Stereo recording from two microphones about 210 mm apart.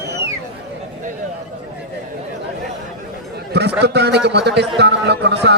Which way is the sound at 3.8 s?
50° right (ahead or behind).